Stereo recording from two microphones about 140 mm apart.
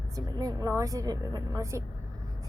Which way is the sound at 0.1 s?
25° right (ahead or behind).